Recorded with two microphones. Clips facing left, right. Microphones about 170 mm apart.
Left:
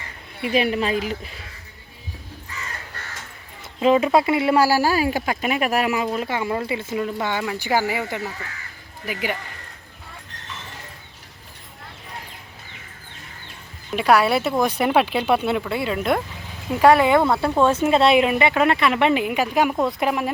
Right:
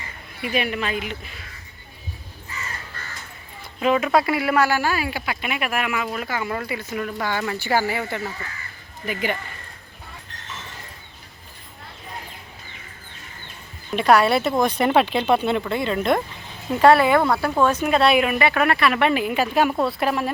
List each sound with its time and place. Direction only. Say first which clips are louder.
0.4 s speech: left 4 dB; 30° left (ahead or behind)
3.8 s speech: left 3 dB; 25° left (ahead or behind); by 9.4 s 10° left (ahead or behind)
13.9 s speech: right 1 dB; 10° left (ahead or behind)
16.8 s speech: even; 15° left (ahead or behind)